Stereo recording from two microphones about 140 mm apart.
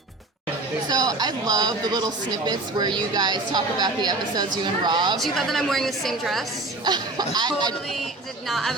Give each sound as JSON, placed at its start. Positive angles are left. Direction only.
{"t": 0.9, "sound": "a woman's voice", "side_deg": -30}
{"t": 5.1, "sound": "a woman's voice", "side_deg": 0}
{"t": 6.8, "sound": "a woman's voice", "side_deg": -30}
{"t": 8.4, "sound": "a woman's voice", "side_deg": 0}